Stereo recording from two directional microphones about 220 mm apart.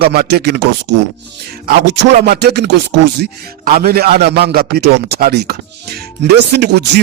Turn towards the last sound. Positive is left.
turn(degrees=-50)  # may be behind; listen again after turning